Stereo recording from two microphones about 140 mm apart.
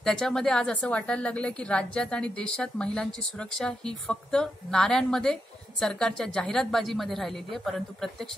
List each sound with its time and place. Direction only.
0.0 s a woman's voice: 5° left (ahead or behind)